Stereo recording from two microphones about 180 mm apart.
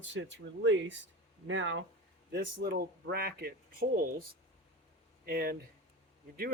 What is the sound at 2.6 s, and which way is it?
Speech, 60° right (ahead or behind).